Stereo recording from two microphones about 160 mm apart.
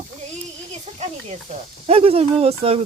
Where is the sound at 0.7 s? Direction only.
45° right (ahead or behind).